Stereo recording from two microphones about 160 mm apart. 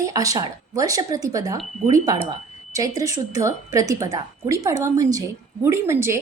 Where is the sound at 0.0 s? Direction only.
20° right (ahead or behind).